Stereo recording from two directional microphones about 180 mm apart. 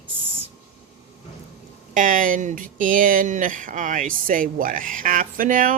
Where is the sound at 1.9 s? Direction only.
45° right (ahead or behind).